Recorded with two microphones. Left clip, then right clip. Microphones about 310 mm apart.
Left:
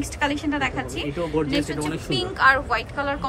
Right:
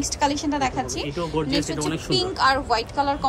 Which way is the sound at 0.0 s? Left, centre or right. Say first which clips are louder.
Right 2 dB; centre.